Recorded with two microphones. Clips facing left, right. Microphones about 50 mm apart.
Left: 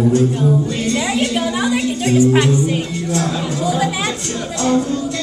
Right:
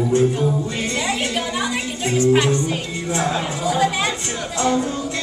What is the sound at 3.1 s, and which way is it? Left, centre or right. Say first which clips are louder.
Music: left 1 dB; right.